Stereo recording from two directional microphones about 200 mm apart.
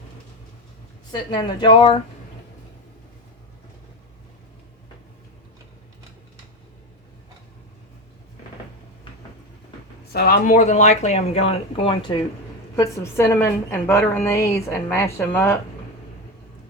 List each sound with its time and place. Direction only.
1.1 s speech: 20° left (ahead or behind)
10.1 s speech: 50° left (ahead or behind)
10.6 s speech: 35° left (ahead or behind)
12.7 s a woman's voice: 15° left (ahead or behind)